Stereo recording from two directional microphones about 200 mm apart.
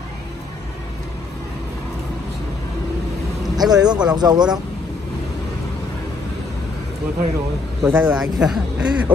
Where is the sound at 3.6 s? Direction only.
20° right (ahead or behind).